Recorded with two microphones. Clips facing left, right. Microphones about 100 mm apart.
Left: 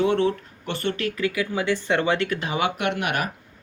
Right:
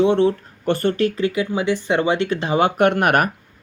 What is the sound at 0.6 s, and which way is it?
Speech, 40° right (ahead or behind).